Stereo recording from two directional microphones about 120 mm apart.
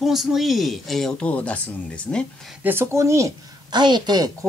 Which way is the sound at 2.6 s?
20° right (ahead or behind).